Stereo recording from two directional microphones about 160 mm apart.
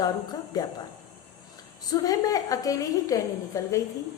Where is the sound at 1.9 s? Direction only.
20° left (ahead or behind).